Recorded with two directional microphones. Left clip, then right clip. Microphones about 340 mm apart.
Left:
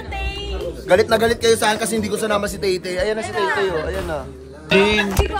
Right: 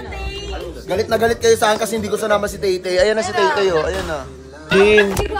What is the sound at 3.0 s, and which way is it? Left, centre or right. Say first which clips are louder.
Speech: right 5 dB; right.